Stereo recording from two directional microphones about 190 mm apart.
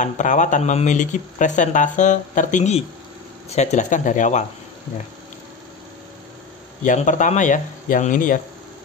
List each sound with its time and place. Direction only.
0.0 s speech: 40° left (ahead or behind)
6.8 s speech: 40° left (ahead or behind)